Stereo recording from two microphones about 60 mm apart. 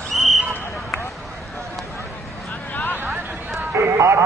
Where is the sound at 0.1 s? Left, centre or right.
Centre.